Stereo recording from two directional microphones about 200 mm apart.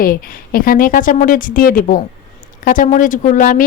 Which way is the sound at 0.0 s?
45° left (ahead or behind).